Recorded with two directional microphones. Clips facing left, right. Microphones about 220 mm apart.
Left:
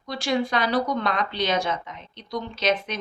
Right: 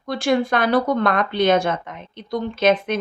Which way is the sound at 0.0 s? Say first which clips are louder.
Right 5 dB; 55° right (ahead or behind).